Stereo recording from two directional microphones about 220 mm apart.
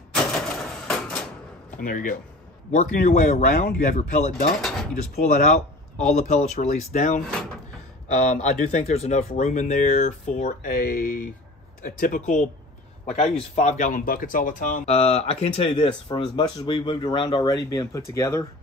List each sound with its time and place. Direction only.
1.8 s speech: 40° left (ahead or behind)
4.6 s mechanisms: centre (ahead or behind)
5.1 s speech: 35° left (ahead or behind); by 18.4 s 15° left (ahead or behind)